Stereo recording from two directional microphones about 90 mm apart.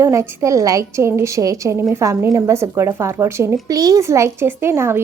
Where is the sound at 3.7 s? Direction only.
45° right (ahead or behind); by 5.0 s 25° right (ahead or behind).